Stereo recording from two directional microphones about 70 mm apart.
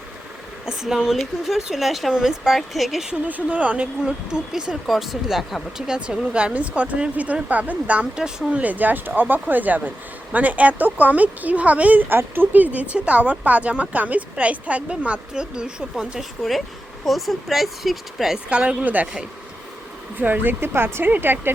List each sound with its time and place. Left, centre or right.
0.6 s speech: centre
3.2 s speech: right; by 5.8 s centre
5.9 s speech: centre
8.6 s speech: right
16.4 s speech: centre
18.4 s speech: centre
20.1 s speech: right